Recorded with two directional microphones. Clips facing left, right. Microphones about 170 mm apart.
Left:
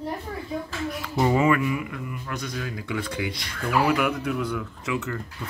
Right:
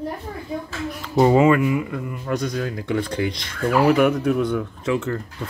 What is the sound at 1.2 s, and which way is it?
Speech, 30° right (ahead or behind).